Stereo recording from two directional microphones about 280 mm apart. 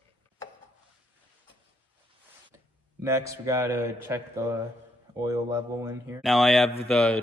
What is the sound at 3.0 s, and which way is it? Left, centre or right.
Speech, centre.